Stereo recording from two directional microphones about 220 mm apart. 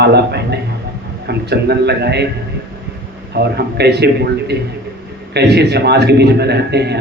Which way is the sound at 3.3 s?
50° right (ahead or behind).